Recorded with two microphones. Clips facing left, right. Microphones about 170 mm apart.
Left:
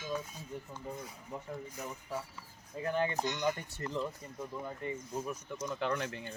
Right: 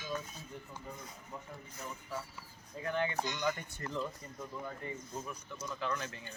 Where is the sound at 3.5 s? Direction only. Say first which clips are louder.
Left 2 dB; 30° left (ahead or behind).